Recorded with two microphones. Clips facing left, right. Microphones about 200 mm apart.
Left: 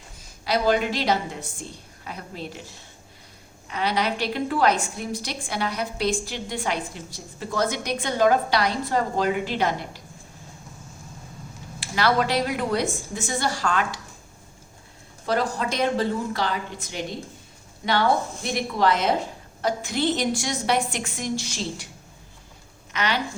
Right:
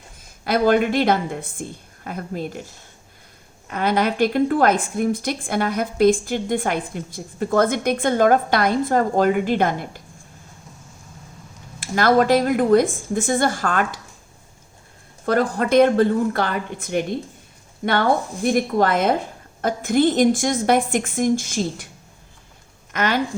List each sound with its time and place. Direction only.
0.4 s a woman's voice: 50° right (ahead or behind)
3.7 s a woman's voice: 50° right (ahead or behind)
11.8 s a woman's voice: 50° right (ahead or behind)
15.3 s a woman's voice: 55° right (ahead or behind)
22.9 s speech: 50° right (ahead or behind)